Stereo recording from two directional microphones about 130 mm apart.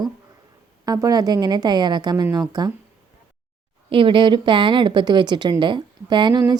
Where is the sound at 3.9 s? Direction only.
40° right (ahead or behind).